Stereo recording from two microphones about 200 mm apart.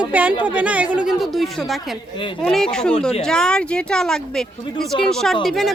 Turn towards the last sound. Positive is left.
turn(degrees=0)  # may be behind; listen again after turning